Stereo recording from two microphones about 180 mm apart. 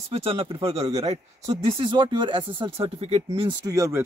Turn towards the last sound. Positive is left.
turn(degrees=-15)  # may be behind; listen again after turning